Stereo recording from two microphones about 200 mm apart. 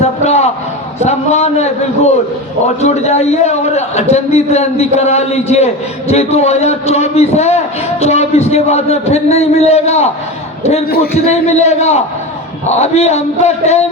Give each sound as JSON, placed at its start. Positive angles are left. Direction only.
{"t": 0.0, "sound": "a sound", "side_deg": 35}
{"t": 0.9, "sound": "a man's voice", "side_deg": 35}
{"t": 2.8, "sound": "a man's voice", "side_deg": 35}
{"t": 10.8, "sound": "a man's voice", "side_deg": 50}
{"t": 11.3, "sound": "a man's voice", "side_deg": 35}